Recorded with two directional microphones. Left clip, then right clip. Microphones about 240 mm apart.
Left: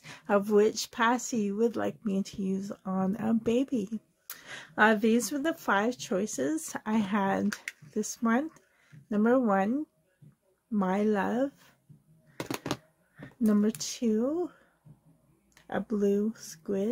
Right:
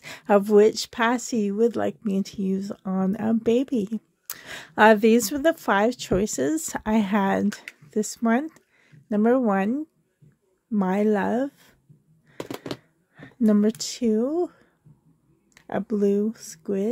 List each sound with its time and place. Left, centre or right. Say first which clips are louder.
0.0 s speech: right 7 dB; right
12.4 s a sound: right 1 dB; centre
13.1 s speech: right 6 dB; right